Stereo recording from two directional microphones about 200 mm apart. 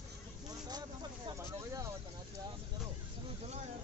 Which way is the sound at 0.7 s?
20° right (ahead or behind).